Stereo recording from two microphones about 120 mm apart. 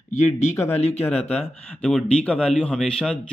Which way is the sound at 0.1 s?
70° left (ahead or behind).